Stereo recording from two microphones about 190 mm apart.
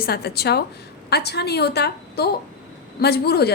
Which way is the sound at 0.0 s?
55° left (ahead or behind).